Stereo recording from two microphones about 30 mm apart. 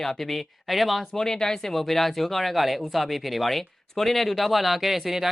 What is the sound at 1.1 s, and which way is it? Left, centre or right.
Speech, centre.